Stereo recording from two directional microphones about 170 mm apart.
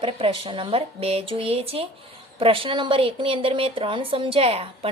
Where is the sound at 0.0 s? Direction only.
30° right (ahead or behind).